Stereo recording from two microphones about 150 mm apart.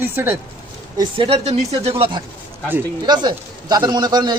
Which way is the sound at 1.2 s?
45° right (ahead or behind).